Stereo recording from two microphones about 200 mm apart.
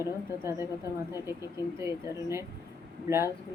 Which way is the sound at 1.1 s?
15° right (ahead or behind).